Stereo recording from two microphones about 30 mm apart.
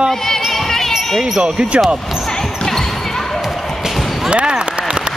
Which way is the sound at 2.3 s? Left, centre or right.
Centre.